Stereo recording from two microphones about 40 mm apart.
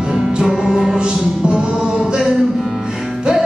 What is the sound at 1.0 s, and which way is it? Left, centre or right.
Mantra, right.